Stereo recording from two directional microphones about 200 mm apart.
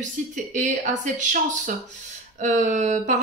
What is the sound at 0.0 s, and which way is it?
A woman's voice, 40° right (ahead or behind).